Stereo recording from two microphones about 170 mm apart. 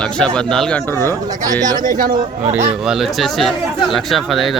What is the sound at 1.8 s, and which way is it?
Speech, 55° right (ahead or behind).